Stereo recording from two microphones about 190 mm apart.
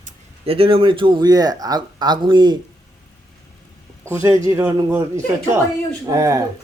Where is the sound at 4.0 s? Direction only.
15° right (ahead or behind).